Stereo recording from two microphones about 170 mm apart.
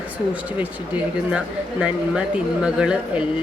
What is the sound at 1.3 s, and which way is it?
Speech, 5° right (ahead or behind).